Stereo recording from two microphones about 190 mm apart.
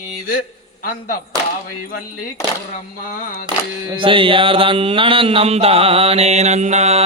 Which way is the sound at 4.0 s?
25° right (ahead or behind).